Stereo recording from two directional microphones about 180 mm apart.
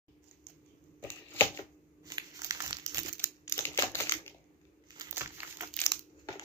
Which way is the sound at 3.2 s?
15° left (ahead or behind).